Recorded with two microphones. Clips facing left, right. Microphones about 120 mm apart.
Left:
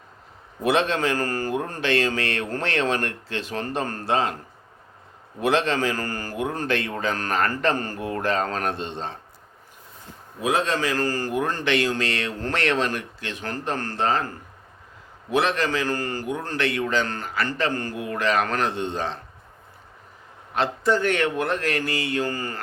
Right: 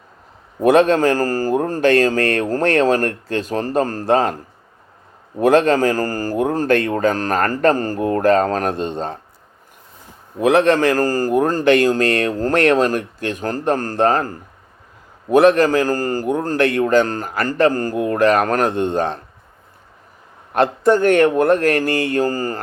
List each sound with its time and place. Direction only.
0.6 s a man's voice: 45° right (ahead or behind)
5.4 s a man's voice: 45° right (ahead or behind)
10.4 s a man's voice: 65° right (ahead or behind)
20.5 s a man's voice: 50° right (ahead or behind)